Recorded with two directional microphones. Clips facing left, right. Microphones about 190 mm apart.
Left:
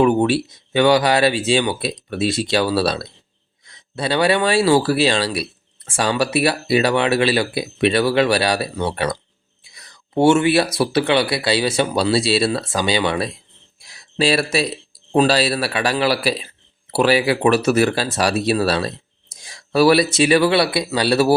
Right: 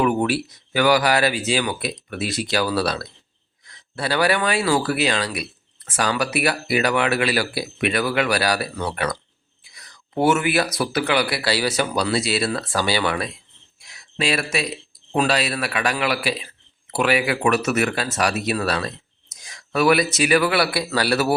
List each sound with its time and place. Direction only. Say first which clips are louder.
0.0 s speech: left 5 dB; 25° left (ahead or behind)
13.8 s a sound: left 5 dB; 35° left (ahead or behind)
15.1 s speech: left 5 dB; 35° left (ahead or behind)